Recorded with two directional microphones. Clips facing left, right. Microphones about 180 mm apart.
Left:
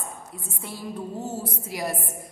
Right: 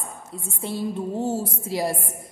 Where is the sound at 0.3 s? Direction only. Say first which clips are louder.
Right 7 dB; 25° right (ahead or behind).